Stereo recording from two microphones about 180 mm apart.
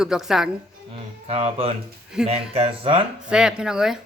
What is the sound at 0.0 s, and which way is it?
Speech, centre (ahead or behind).